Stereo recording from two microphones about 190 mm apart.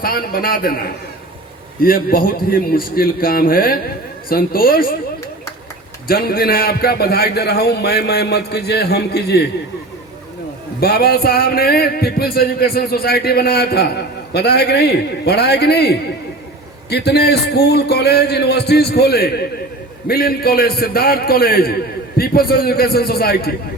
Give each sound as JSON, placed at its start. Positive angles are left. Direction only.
{"t": 0.0, "sound": "a man's voice", "side_deg": 50}
{"t": 6.1, "sound": "a man's voice", "side_deg": 50}
{"t": 10.8, "sound": "a man's voice", "side_deg": 55}